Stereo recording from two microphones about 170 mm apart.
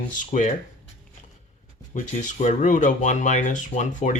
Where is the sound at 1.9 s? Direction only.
45° left (ahead or behind).